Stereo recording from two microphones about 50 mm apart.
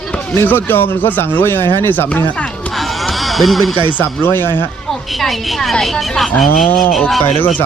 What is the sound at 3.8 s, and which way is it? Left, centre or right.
Speech, left.